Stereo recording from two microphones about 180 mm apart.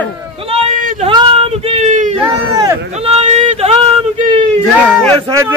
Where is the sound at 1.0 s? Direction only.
30° right (ahead or behind).